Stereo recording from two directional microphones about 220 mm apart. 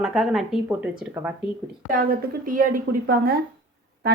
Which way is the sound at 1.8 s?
40° right (ahead or behind).